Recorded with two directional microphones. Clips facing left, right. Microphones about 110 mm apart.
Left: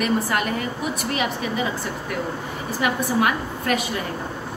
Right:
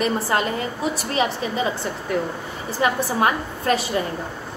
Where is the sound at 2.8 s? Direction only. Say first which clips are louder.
Right 1 dB; 30° right (ahead or behind).